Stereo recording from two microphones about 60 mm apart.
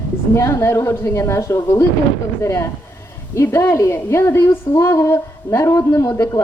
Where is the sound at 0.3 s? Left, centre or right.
Left.